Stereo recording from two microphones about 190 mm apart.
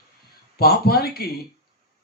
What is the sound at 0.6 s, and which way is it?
Speech, 55° left (ahead or behind).